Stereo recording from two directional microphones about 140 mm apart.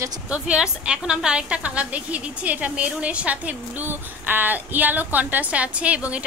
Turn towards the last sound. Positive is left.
turn(degrees=-10)  # may be behind; listen again after turning